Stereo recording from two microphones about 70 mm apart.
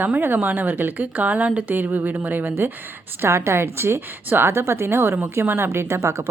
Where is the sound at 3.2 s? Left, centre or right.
Right.